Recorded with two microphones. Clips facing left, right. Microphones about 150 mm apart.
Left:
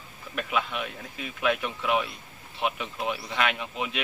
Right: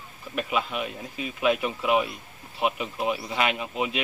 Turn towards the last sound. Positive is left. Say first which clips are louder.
# right 3 dB
turn(degrees=-5)  # may be behind; listen again after turning